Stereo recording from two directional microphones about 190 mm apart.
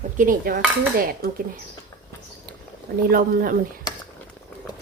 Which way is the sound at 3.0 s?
50° right (ahead or behind).